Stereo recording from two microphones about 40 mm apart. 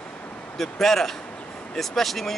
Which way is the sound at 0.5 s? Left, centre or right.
Centre.